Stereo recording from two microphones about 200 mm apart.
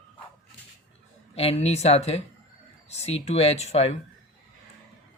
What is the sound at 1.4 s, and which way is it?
Speech, 30° left (ahead or behind).